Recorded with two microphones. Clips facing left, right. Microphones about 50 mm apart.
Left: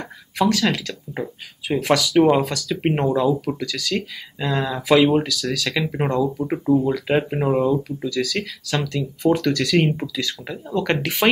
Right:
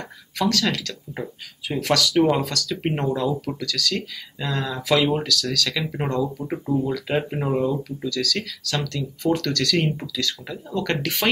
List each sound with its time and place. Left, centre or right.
0.0 s speech: centre